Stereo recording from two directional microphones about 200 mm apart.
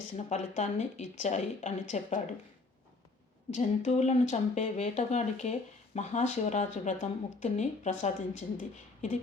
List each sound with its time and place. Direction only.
0.1 s speech: 35° left (ahead or behind)
3.5 s speech: 35° left (ahead or behind)